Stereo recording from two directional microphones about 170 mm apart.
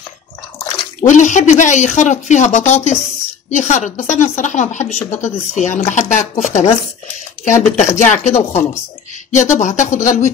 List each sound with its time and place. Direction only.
1.0 s speech: 45° left (ahead or behind)